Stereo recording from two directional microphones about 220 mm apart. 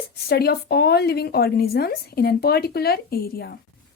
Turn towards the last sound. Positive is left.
turn(degrees=45)  # may be behind; listen again after turning